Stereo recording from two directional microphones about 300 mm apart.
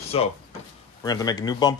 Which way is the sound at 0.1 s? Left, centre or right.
Centre.